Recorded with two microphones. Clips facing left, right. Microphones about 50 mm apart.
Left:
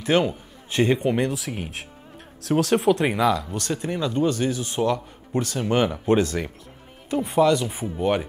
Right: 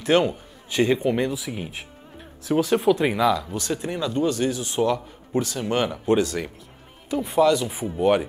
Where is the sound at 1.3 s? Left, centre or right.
Left.